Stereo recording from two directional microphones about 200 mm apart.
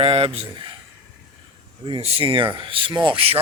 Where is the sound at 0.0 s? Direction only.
30° right (ahead or behind).